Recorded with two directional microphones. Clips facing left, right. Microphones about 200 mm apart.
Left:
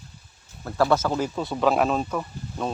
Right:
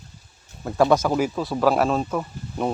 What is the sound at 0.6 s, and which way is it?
Speech, 15° right (ahead or behind).